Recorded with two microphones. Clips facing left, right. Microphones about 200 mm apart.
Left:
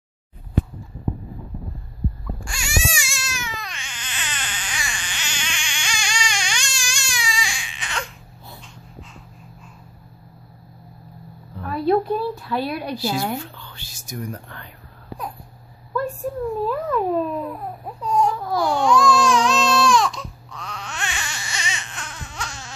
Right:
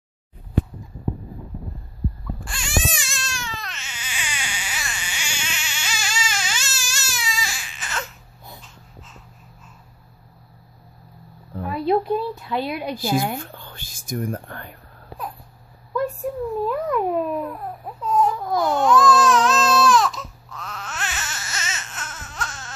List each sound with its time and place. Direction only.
2.4 s baby cry: centre (ahead or behind)
11.6 s a sound: 20° right (ahead or behind)
12.9 s a woman's voice: 50° right (ahead or behind)
15.9 s a sound: 15° right (ahead or behind)
16.6 s babbling: 15° right (ahead or behind)
17.5 s baby cry: centre (ahead or behind)